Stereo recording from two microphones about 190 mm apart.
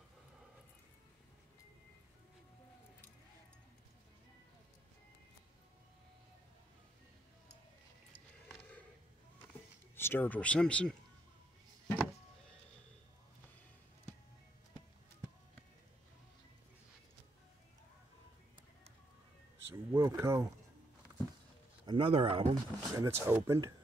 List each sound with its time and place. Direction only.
9.9 s speech: 10° left (ahead or behind)
19.9 s a sound: 15° right (ahead or behind)
21.8 s speech: 25° right (ahead or behind)
22.4 s speech: 20° right (ahead or behind)